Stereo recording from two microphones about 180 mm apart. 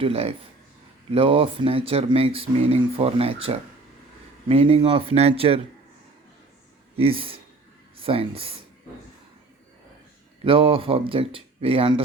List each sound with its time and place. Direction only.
0.0 s speech: 35° right (ahead or behind)
6.9 s speech: 30° right (ahead or behind)
10.4 s speech: 30° right (ahead or behind)